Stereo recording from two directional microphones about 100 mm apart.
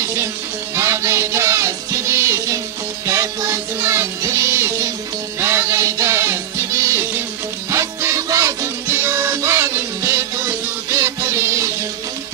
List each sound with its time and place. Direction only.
0.0 s music: 30° right (ahead or behind)
8.8 s music: 25° right (ahead or behind)